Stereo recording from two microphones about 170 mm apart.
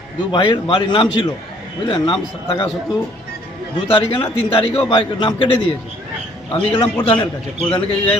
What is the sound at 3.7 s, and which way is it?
A man's voice, 30° left (ahead or behind).